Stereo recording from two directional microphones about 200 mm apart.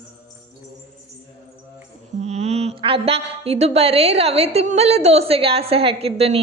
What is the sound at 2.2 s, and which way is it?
A woman's voice, 30° right (ahead or behind).